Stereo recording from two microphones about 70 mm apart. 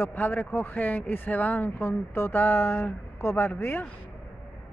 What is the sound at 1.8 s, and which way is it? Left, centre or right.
A woman's voice, left.